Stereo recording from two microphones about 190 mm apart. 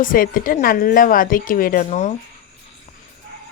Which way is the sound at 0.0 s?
45° left (ahead or behind).